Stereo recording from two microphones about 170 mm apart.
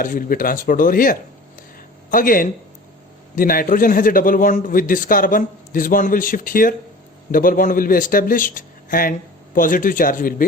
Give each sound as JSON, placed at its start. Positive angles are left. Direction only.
{"t": 0.0, "sound": "a man's voice", "side_deg": 55}